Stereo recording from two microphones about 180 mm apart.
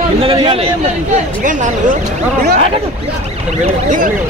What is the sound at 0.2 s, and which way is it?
Speech, 30° right (ahead or behind).